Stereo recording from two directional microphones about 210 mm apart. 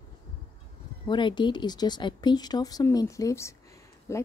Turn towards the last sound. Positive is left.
turn(degrees=15)  # may be behind; listen again after turning